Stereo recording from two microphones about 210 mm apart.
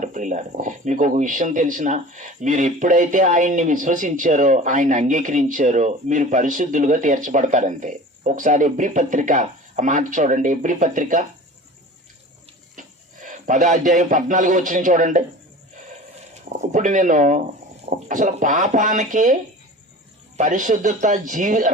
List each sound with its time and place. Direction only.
0.0 s speech: 35° right (ahead or behind)
12.8 s water: 35° right (ahead or behind)
13.2 s speech: 35° right (ahead or behind)
16.3 s speech: 35° right (ahead or behind)